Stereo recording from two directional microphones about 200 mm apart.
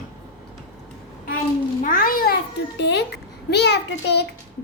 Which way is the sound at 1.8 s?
45° left (ahead or behind).